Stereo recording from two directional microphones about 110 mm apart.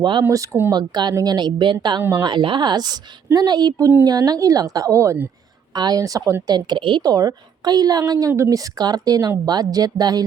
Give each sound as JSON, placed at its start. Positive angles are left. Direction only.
{"t": 0.2, "sound": "a woman's voice", "side_deg": -30}
{"t": 0.7, "sound": "a woman's voice", "side_deg": -40}
{"t": 2.0, "sound": "a woman's voice", "side_deg": -25}
{"t": 2.2, "sound": "a woman's voice", "side_deg": -45}
{"t": 6.5, "sound": "a woman's voice", "side_deg": -45}